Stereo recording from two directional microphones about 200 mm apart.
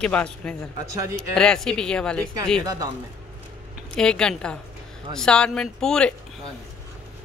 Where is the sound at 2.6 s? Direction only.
20° right (ahead or behind).